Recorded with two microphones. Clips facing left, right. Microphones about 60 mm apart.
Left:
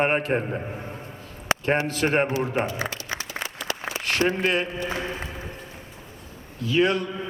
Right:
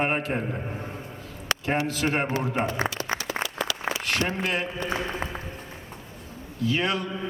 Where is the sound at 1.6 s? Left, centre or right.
Left.